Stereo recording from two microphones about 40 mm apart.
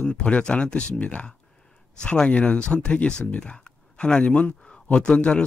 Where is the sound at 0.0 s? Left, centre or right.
Left.